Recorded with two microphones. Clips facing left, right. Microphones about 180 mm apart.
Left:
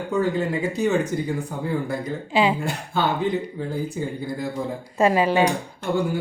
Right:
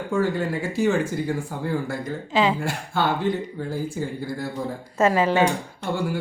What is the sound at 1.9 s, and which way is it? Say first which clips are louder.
A man's voice: left 1 dB; 15° left (ahead or behind).